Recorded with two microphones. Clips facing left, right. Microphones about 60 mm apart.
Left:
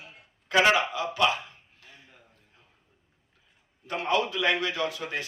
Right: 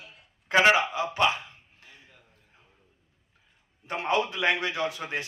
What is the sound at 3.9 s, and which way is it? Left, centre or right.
A man's voice, right.